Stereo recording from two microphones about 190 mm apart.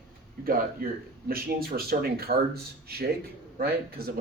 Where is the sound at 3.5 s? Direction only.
55° right (ahead or behind).